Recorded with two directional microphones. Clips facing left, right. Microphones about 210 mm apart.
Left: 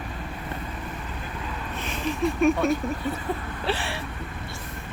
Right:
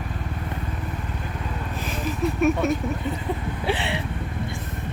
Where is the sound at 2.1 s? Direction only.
5° right (ahead or behind).